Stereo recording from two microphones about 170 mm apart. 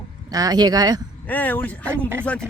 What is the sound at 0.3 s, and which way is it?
Speech, 20° right (ahead or behind).